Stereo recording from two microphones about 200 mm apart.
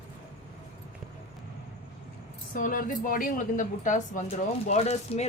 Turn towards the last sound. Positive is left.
turn(degrees=30)  # may be behind; listen again after turning